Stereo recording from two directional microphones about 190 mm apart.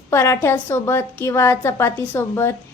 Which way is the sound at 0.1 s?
15° left (ahead or behind).